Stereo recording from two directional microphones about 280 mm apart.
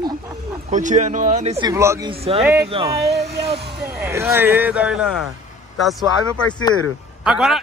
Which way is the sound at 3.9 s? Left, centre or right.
Centre.